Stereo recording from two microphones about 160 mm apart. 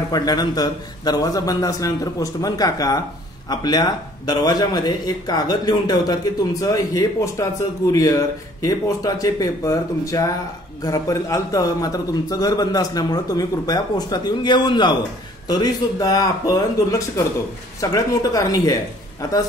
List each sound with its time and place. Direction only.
0.1 s a man's voice: 25° left (ahead or behind)
17.7 s a man's voice: 20° left (ahead or behind)